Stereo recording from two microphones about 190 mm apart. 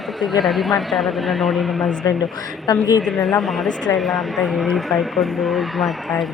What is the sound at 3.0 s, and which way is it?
Speech, 5° left (ahead or behind).